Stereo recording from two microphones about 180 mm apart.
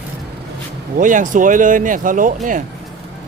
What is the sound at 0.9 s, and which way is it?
Speech, 45° right (ahead or behind).